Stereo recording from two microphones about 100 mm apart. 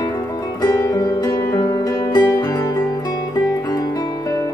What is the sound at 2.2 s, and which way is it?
Music, 30° left (ahead or behind).